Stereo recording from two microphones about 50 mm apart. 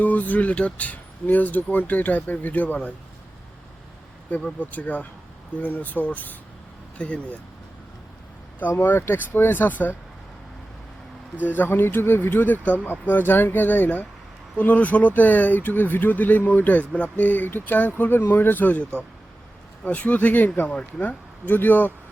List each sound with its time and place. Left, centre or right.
0.0 s speech: left
4.6 s speech: left
9.0 s speech: left
11.4 s speech: left
21.4 s speech: left